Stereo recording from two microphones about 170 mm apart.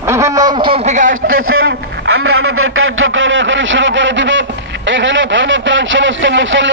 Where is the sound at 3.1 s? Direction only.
90° right.